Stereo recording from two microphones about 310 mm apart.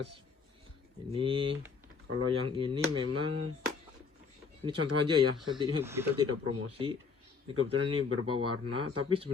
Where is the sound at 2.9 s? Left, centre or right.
Right.